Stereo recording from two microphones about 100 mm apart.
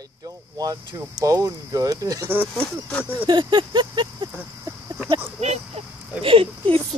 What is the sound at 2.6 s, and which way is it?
Speech, 10° left (ahead or behind).